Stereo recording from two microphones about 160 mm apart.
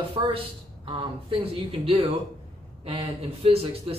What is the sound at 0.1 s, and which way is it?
A man's voice, 35° right (ahead or behind).